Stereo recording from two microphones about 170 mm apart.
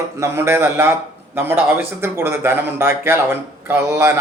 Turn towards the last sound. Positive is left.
turn(degrees=-15)  # may be behind; listen again after turning